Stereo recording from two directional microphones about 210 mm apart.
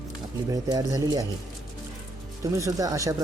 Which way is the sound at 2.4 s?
15° right (ahead or behind).